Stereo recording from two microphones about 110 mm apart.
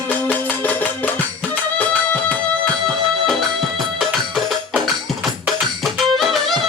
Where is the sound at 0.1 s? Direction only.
15° left (ahead or behind).